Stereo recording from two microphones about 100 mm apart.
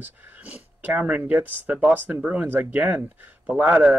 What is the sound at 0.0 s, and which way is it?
Speech, 15° right (ahead or behind).